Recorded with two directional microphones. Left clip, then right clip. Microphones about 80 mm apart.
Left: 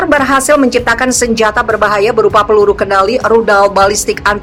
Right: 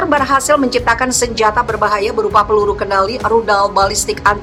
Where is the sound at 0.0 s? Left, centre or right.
Left.